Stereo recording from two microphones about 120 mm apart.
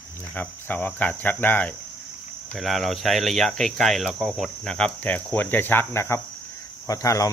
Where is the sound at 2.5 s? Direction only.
Centre (ahead or behind).